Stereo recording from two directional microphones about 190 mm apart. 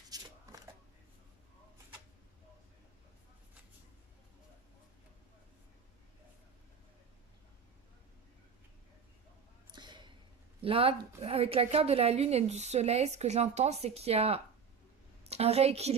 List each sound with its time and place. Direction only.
0.1 s scissors: 20° right (ahead or behind)
9.7 s a sound: 25° right (ahead or behind)
10.6 s a woman's voice: 30° right (ahead or behind)